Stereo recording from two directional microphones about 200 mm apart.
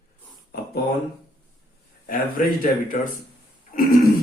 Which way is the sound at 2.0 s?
45° left (ahead or behind).